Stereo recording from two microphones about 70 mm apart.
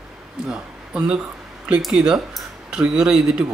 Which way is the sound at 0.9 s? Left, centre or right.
Centre.